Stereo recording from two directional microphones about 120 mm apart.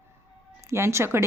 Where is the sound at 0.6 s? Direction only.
25° right (ahead or behind).